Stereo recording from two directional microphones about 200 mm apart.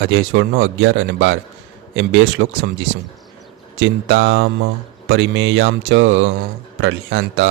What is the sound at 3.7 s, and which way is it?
Speech, 65° right (ahead or behind).